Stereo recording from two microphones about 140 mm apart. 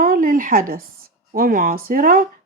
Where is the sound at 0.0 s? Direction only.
85° right.